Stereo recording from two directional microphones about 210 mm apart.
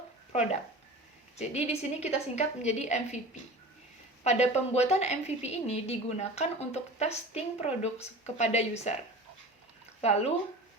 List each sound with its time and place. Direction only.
1.4 s a woman's voice: 30° left (ahead or behind)
4.2 s a woman's voice: 30° left (ahead or behind)
10.0 s a woman's voice: 30° left (ahead or behind)